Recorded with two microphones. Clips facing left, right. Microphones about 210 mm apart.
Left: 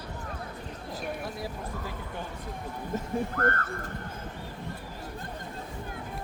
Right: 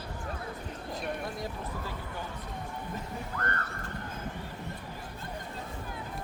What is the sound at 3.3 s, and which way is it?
Speech, 50° left (ahead or behind).